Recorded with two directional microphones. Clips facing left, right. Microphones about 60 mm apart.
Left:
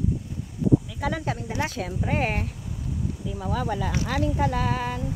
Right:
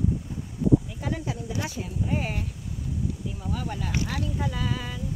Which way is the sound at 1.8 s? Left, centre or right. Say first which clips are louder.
Left 3 dB; left.